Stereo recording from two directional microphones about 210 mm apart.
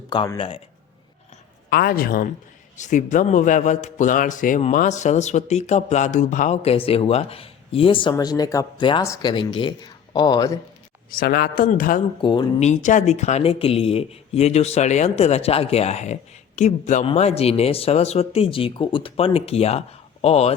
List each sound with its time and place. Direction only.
0.1 s speech: 20° left (ahead or behind)
1.7 s a man's voice: 45° left (ahead or behind); by 10.6 s 20° left (ahead or behind)
11.1 s a man's voice: 45° left (ahead or behind)
12.2 s speech: 25° left (ahead or behind)